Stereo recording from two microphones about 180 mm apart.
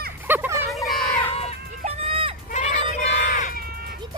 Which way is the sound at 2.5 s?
40° left (ahead or behind).